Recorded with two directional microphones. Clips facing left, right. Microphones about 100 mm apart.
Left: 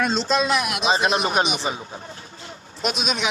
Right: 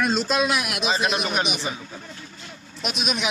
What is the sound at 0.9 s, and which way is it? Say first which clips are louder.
Speech: left 4 dB; 35° left (ahead or behind).